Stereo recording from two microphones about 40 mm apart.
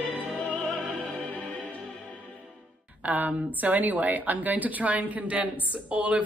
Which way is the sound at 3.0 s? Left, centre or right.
Right.